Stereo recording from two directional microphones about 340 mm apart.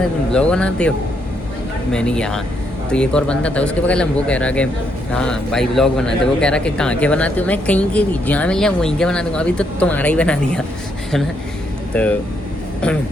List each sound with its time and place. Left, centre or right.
0.3 s a man's voice: centre
11.9 s a man's voice: centre